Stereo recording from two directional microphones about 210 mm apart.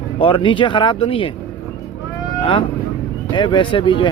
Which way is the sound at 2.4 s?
25° left (ahead or behind).